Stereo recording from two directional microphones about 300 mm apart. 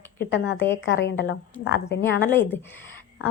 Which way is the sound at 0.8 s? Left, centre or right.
Left.